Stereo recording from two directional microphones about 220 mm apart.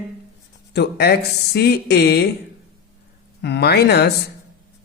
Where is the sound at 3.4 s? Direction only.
50° left (ahead or behind).